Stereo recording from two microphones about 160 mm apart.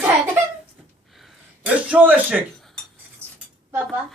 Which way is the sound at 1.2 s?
5° right (ahead or behind).